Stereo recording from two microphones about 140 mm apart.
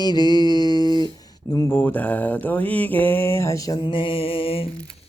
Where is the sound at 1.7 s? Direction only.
10° left (ahead or behind); by 4.7 s 40° left (ahead or behind).